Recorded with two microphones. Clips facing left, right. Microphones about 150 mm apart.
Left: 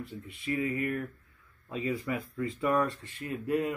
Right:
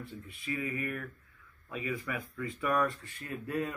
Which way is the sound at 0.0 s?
20° left (ahead or behind).